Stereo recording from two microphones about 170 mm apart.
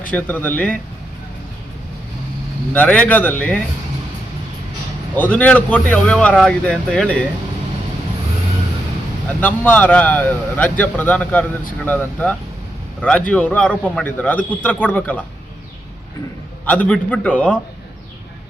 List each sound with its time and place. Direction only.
0.1 s a man's voice: 10° left (ahead or behind)
2.7 s a man's voice: 10° left (ahead or behind)
5.1 s a man's voice: 10° left (ahead or behind)
9.4 s a man's voice: 10° left (ahead or behind)
16.6 s a man's voice: 10° left (ahead or behind)